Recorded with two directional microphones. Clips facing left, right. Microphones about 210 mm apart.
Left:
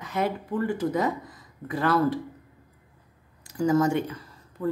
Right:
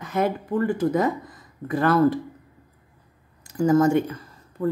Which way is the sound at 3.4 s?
50° right (ahead or behind).